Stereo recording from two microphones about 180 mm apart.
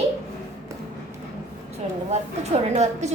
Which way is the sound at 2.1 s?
40° right (ahead or behind).